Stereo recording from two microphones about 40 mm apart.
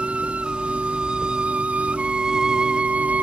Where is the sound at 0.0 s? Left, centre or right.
Right.